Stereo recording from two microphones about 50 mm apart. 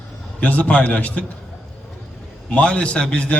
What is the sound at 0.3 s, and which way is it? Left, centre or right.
Speech, left.